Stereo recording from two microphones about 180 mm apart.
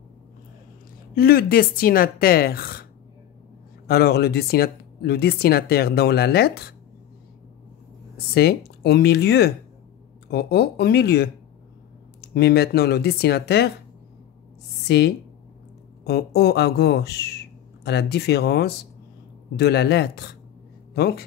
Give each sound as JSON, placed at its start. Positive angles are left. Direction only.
{"t": 1.1, "sound": "speech", "side_deg": 55}
{"t": 8.4, "sound": "speech", "side_deg": 60}
{"t": 14.9, "sound": "speech", "side_deg": 65}